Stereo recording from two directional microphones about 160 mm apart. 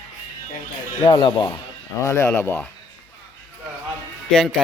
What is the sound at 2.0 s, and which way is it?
Speech, 15° left (ahead or behind).